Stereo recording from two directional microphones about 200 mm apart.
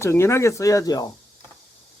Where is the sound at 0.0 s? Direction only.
15° left (ahead or behind).